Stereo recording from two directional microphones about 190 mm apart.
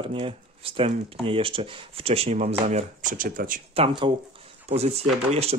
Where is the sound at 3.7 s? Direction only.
30° right (ahead or behind).